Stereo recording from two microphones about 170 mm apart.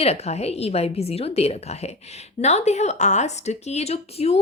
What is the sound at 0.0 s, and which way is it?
Speech, 40° left (ahead or behind).